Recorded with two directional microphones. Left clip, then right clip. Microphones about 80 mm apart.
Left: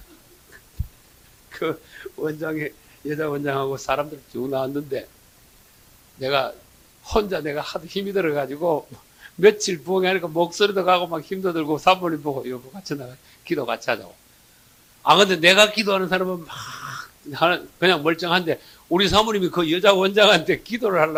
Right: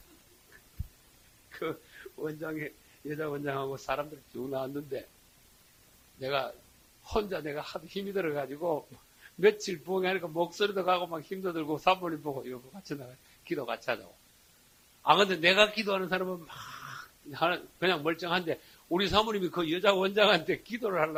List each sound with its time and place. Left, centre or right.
1.5 s a man's voice: right
6.1 s a man's voice: right